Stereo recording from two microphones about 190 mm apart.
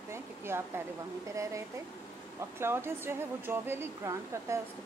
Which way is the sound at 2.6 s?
10° right (ahead or behind).